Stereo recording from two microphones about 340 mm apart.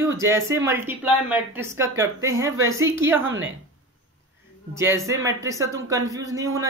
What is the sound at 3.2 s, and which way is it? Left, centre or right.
Speech, right.